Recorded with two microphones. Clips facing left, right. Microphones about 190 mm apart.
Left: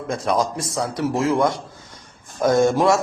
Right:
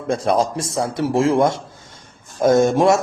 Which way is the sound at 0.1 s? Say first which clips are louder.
Right 4 dB; 30° right (ahead or behind).